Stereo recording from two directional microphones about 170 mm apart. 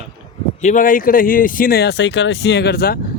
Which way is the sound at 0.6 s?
50° left (ahead or behind).